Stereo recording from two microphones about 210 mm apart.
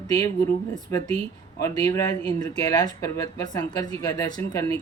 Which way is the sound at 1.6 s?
15° left (ahead or behind).